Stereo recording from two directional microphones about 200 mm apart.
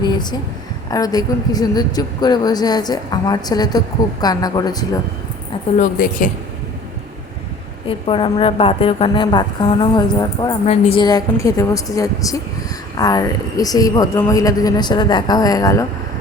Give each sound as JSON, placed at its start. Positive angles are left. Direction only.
{"t": 0.0, "sound": "a sound", "side_deg": 20}
{"t": 0.9, "sound": "a woman's voice", "side_deg": 20}
{"t": 5.7, "sound": "a woman's voice", "side_deg": 40}
{"t": 7.9, "sound": "a woman's voice", "side_deg": 25}